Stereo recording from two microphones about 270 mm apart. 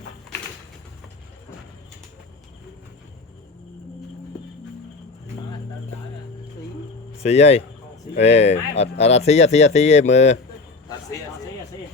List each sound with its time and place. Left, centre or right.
7.2 s speech: left